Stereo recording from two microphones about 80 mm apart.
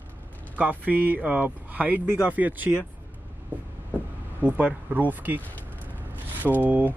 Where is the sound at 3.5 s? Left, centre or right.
Right.